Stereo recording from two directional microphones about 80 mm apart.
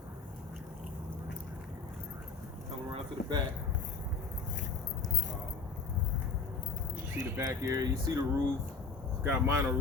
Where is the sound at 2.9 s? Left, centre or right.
Right.